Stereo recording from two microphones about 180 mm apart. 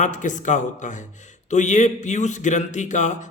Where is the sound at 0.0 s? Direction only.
45° left (ahead or behind).